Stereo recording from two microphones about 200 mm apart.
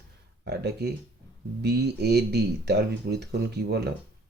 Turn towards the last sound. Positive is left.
turn(degrees=-55)  # may be behind; listen again after turning